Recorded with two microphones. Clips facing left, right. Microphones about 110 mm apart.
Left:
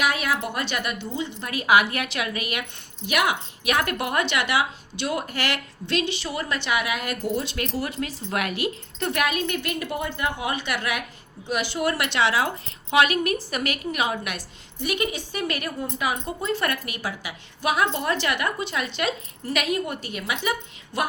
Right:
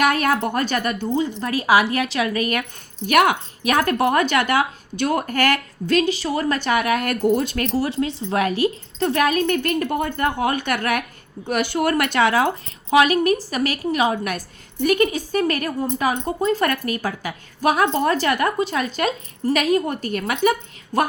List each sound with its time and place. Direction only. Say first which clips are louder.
0.0 s a woman's voice: right 6 dB; 50° right (ahead or behind)
7.9 s a woman's voice: right 7 dB; 30° right (ahead or behind)